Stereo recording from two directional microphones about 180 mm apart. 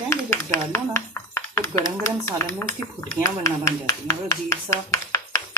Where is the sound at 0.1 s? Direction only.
15° left (ahead or behind).